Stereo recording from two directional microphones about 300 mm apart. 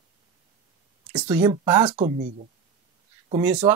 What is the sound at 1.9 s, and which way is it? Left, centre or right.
Speech, right.